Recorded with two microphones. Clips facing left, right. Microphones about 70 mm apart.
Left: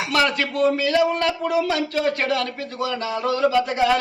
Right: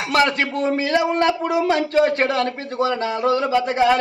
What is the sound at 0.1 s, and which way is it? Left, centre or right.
Speech, right.